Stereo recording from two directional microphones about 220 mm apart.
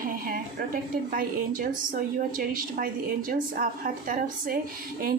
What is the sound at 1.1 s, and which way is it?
A woman's voice, 35° right (ahead or behind).